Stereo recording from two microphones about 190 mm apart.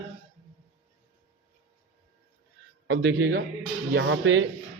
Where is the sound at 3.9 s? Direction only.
80° right.